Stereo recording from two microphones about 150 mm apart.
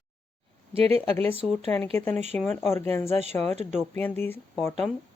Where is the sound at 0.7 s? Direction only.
40° right (ahead or behind).